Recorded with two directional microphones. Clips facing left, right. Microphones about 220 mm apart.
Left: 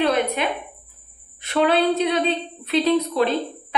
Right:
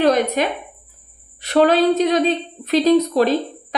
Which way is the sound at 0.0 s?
40° right (ahead or behind).